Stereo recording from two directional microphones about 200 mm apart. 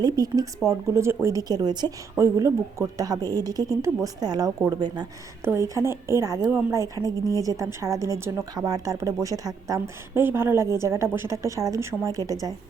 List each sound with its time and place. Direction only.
0.0 s a woman's voice: 20° right (ahead or behind)